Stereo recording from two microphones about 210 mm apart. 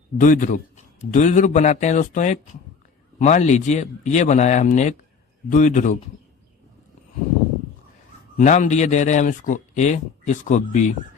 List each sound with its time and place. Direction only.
0.2 s speech: 40° left (ahead or behind)
8.4 s speech: 35° left (ahead or behind)